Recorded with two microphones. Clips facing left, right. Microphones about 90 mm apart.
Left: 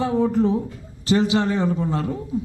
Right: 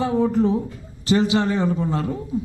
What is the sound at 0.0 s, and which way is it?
A man's voice, 20° right (ahead or behind).